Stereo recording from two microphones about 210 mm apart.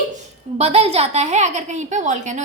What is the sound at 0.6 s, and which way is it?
A woman's voice, 30° right (ahead or behind).